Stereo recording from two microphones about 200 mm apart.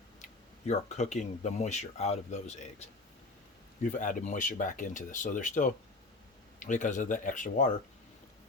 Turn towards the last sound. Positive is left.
turn(degrees=40)  # may be behind; listen again after turning